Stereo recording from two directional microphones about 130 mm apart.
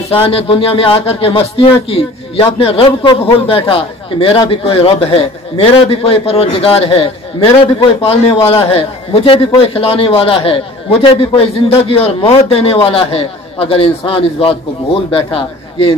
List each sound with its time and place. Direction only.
0.1 s a man's voice: 45° left (ahead or behind)